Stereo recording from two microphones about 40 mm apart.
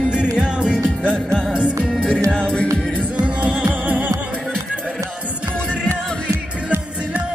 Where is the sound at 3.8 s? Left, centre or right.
Right.